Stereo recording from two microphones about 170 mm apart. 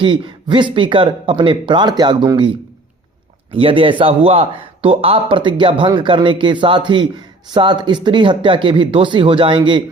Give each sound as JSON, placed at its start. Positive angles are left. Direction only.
{"t": 0.0, "sound": "speech", "side_deg": -30}
{"t": 3.5, "sound": "a man's voice", "side_deg": -30}